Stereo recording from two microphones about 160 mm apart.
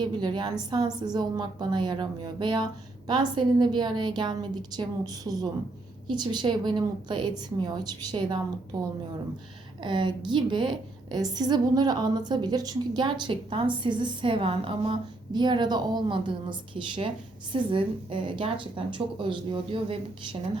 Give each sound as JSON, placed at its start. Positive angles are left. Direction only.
{"t": 0.0, "sound": "a woman's voice", "side_deg": -30}